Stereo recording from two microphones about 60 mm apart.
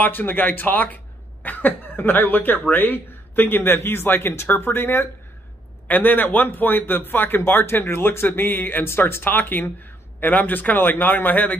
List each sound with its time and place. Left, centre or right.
0.0 s speech: left